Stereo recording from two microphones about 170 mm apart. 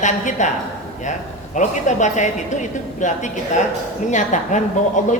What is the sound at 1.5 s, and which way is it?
A woman's voice, 45° left (ahead or behind).